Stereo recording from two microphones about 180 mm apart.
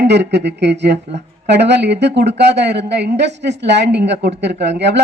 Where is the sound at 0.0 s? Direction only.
70° right (ahead or behind).